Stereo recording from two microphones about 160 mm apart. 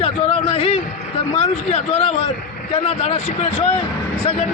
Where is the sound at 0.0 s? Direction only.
35° left (ahead or behind).